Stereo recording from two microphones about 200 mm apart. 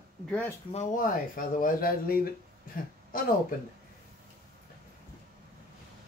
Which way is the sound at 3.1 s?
45° left (ahead or behind).